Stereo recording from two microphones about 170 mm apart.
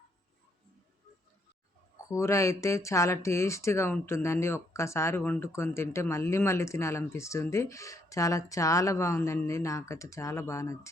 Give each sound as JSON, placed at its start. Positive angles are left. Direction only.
{"t": 2.0, "sound": "speech", "side_deg": 15}